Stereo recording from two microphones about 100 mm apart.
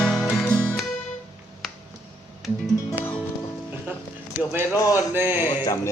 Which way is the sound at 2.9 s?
20° left (ahead or behind).